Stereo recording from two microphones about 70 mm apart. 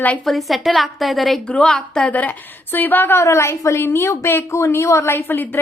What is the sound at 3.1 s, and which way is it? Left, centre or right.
Speech, left.